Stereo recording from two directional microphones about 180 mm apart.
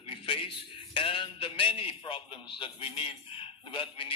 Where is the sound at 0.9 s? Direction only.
30° left (ahead or behind).